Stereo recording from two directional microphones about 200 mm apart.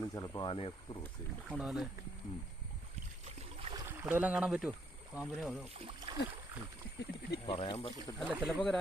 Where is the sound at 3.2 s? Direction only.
30° right (ahead or behind).